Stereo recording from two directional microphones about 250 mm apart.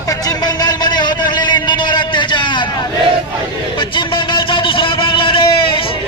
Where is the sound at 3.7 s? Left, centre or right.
Centre.